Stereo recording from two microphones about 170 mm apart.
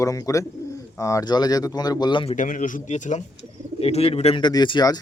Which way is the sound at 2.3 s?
50° left (ahead or behind).